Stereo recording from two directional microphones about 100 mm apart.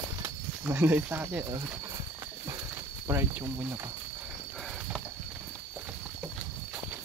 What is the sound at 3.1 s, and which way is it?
Speech, 25° right (ahead or behind).